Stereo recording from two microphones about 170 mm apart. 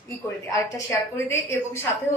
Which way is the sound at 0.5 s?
20° left (ahead or behind).